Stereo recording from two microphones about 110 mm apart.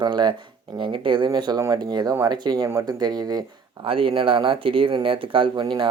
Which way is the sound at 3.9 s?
55° right (ahead or behind).